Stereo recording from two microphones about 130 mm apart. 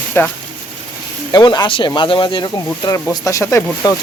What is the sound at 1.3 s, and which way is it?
Speech, 30° left (ahead or behind).